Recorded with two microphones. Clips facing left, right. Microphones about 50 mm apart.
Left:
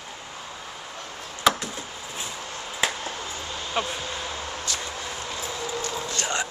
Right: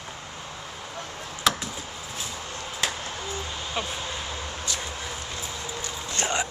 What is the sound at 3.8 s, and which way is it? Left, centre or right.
Speech, centre.